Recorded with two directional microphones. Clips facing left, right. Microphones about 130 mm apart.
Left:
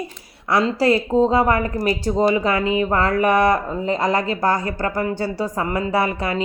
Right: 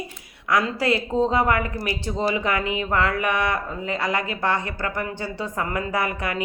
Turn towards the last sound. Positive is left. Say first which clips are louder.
# left 5 dB
turn(degrees=30)  # may be behind; listen again after turning